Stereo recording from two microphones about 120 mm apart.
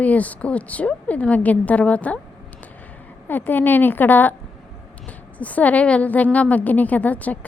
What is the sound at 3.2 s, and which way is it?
A woman's voice, 15° left (ahead or behind).